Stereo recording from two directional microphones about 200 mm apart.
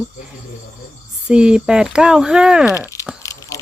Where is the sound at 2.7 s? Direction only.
15° left (ahead or behind).